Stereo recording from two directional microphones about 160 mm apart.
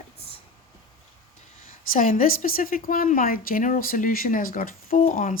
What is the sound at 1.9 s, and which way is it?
Speech, 60° left (ahead or behind).